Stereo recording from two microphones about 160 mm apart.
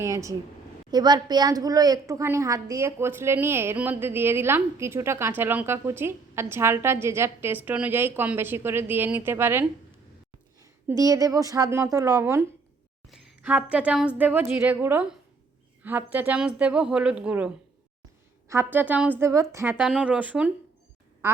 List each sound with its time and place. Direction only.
0.0 s a woman's voice: 20° right (ahead or behind)
13.1 s a woman's voice: 5° right (ahead or behind)
19.7 s a woman's voice: 5° right (ahead or behind)